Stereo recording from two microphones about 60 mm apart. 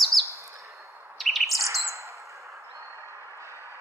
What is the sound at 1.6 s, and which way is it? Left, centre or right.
Bird, right.